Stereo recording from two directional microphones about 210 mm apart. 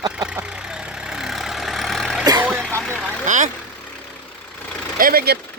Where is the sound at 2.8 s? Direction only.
5° left (ahead or behind).